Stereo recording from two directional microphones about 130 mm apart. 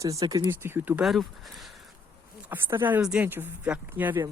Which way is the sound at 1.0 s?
Centre (ahead or behind).